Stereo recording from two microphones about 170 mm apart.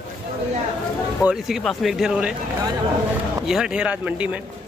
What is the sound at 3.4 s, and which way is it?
Speech, 5° right (ahead or behind).